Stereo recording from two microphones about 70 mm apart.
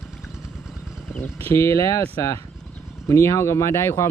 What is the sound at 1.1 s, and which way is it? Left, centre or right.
Speech, left.